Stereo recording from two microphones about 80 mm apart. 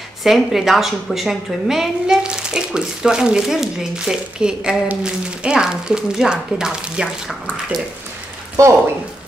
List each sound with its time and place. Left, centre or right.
0.2 s a woman's voice: centre
8.6 s speech: right